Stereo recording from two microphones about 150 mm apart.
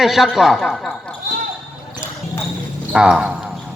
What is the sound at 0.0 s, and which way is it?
Speech, centre (ahead or behind).